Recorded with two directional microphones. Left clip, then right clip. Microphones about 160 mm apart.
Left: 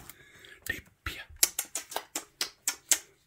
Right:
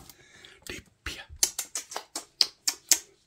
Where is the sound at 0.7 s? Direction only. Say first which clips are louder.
Left 2 dB; 5° right (ahead or behind).